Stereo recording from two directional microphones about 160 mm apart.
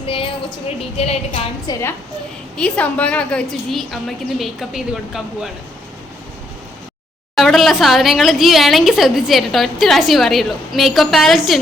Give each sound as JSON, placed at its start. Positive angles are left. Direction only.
{"t": 0.0, "sound": "a sound", "side_deg": 35}
{"t": 0.8, "sound": "a woman's voice", "side_deg": 40}
{"t": 1.6, "sound": "a woman's voice", "side_deg": 20}
{"t": 2.6, "sound": "a woman's voice", "side_deg": 5}
{"t": 7.3, "sound": "a woman's voice", "side_deg": 0}